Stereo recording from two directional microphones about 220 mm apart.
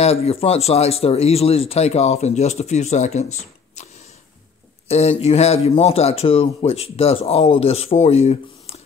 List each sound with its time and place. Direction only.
0.0 s speech: 30° left (ahead or behind)
4.8 s speech: 30° left (ahead or behind)